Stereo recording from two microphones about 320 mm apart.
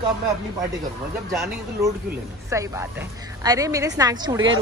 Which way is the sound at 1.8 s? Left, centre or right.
Centre.